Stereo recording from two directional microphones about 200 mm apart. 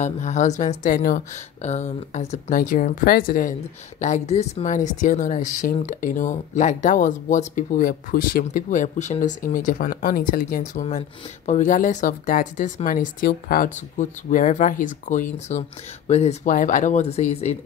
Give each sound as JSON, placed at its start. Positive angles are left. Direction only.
{"t": 0.0, "sound": "speech", "side_deg": 35}